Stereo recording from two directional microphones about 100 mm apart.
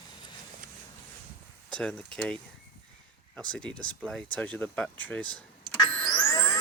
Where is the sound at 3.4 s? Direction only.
10° left (ahead or behind).